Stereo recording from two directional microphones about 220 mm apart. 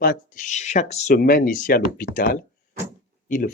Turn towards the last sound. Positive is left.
turn(degrees=35)  # may be behind; listen again after turning